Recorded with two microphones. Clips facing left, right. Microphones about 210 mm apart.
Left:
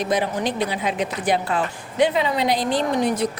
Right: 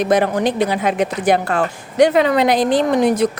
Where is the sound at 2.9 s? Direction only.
90° right.